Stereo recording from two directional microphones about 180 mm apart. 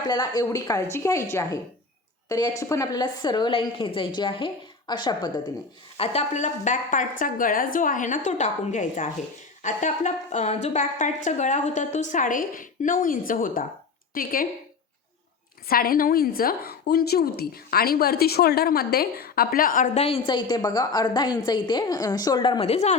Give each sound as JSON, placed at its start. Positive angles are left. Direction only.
{"t": 0.1, "sound": "a woman's voice", "side_deg": 20}
{"t": 6.0, "sound": "a woman's voice", "side_deg": 40}
{"t": 15.7, "sound": "a woman's voice", "side_deg": 55}